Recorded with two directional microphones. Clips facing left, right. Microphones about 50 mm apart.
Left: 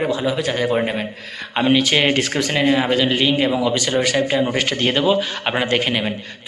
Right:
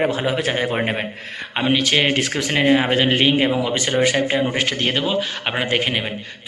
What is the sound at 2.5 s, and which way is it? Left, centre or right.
Speech, centre.